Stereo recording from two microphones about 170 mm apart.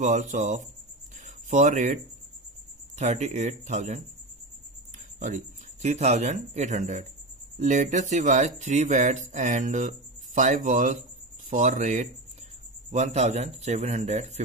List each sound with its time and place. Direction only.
0.0 s speech: 45° right (ahead or behind)
1.2 s a sound: 45° right (ahead or behind)
3.0 s speech: 45° right (ahead or behind)
5.2 s a man's voice: 45° right (ahead or behind)